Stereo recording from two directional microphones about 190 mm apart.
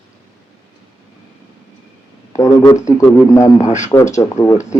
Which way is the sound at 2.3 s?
15° left (ahead or behind).